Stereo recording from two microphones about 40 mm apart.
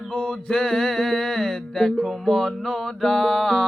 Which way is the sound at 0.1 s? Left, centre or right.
Left.